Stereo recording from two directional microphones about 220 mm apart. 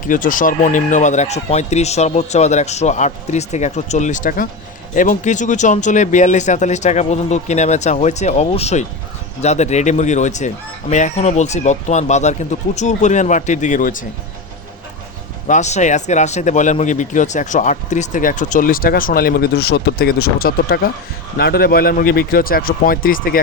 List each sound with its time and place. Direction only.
0.1 s speech: 35° left (ahead or behind)
15.4 s speech: 35° left (ahead or behind)